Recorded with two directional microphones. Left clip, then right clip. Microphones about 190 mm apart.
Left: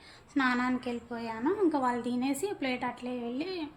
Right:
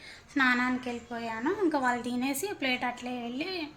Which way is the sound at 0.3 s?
5° right (ahead or behind).